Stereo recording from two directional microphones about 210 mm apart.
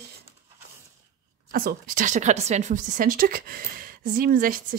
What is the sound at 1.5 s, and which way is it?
A woman's voice, 45° right (ahead or behind).